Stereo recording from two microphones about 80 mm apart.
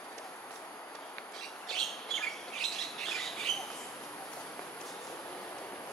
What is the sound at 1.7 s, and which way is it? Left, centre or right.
Bird, centre.